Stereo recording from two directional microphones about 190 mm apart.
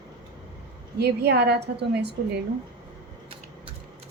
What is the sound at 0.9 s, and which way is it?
A woman's voice, 60° right (ahead or behind).